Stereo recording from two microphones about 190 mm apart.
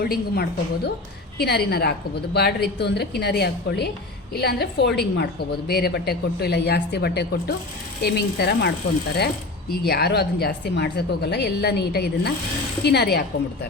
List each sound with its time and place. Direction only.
0.0 s a woman's voice: 55° left (ahead or behind)